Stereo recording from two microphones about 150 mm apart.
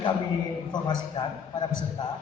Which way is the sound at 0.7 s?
30° left (ahead or behind).